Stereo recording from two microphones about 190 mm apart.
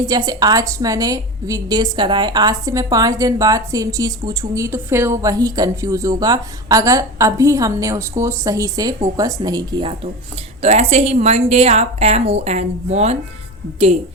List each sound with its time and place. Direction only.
0.0 s a woman's voice: 20° right (ahead or behind)
10.6 s a woman's voice: 35° right (ahead or behind)